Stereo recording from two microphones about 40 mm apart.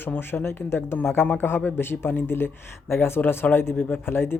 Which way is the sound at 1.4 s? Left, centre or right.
Left.